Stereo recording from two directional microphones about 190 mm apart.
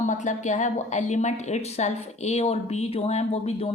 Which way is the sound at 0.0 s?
40° left (ahead or behind).